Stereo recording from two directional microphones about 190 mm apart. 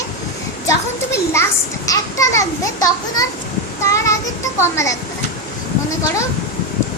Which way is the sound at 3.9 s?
15° left (ahead or behind).